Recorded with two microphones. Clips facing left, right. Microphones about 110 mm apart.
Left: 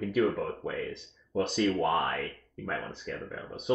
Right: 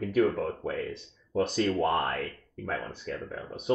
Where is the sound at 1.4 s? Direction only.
Centre (ahead or behind).